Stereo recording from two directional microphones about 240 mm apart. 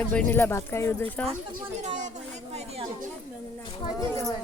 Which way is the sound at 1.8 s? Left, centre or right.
Right.